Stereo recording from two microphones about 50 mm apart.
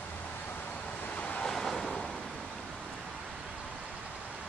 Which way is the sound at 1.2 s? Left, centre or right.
Left.